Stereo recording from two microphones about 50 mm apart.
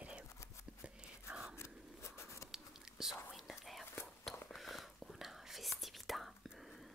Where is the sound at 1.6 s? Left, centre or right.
Left.